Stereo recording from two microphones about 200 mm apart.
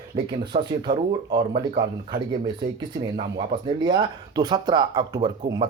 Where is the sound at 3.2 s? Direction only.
25° right (ahead or behind).